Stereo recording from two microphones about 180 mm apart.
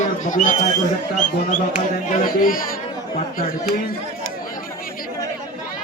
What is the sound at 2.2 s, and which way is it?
Speech, 50° left (ahead or behind).